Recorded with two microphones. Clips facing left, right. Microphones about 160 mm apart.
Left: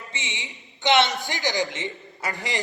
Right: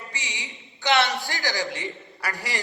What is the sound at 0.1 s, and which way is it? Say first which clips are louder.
A woman's voice: left 1 dB; 20° left (ahead or behind).